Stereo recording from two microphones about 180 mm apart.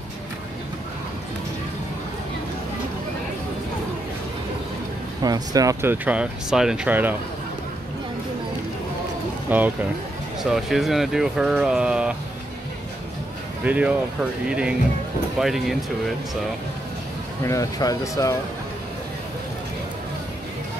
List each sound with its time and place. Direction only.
5.2 s speech: 20° right (ahead or behind)
9.5 s speech: 10° right (ahead or behind)
13.7 s speech: 5° right (ahead or behind)
17.5 s speech: 20° left (ahead or behind)